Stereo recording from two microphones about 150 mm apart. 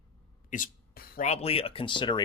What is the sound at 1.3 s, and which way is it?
Speech, 40° left (ahead or behind).